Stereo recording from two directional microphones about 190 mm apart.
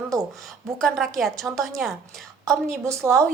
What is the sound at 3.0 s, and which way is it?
Speech, 20° right (ahead or behind).